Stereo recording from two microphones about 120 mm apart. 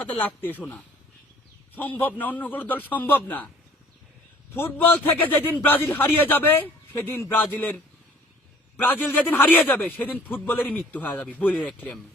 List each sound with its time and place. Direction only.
0.0 s a man's voice: 15° left (ahead or behind)
4.5 s a man's voice: 20° left (ahead or behind)
8.8 s a man's voice: 15° left (ahead or behind)